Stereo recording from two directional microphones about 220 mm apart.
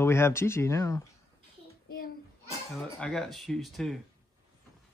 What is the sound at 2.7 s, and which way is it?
Speech, 5° left (ahead or behind).